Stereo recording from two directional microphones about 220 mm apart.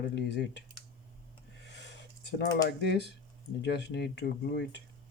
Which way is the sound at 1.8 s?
50° left (ahead or behind).